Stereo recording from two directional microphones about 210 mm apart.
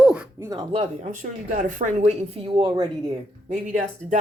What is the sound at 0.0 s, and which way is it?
Speech, 5° right (ahead or behind).